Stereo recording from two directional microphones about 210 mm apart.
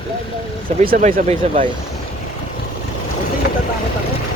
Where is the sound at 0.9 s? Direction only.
40° right (ahead or behind).